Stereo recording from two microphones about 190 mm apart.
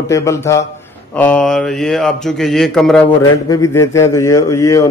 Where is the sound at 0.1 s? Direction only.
15° left (ahead or behind).